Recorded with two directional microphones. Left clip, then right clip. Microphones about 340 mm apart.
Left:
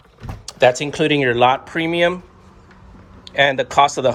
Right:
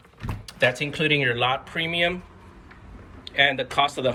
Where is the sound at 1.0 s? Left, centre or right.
Centre.